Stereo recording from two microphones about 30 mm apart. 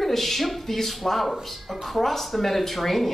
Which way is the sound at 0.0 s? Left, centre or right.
Centre.